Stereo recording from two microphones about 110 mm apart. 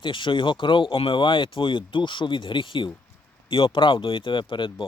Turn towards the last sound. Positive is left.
turn(degrees=50)  # may be behind; listen again after turning